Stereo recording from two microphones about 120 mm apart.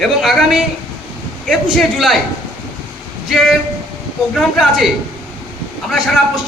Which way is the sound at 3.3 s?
Centre (ahead or behind).